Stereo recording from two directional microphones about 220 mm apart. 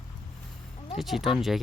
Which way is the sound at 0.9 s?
Centre (ahead or behind).